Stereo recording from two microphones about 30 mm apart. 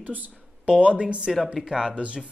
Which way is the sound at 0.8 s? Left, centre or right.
Right.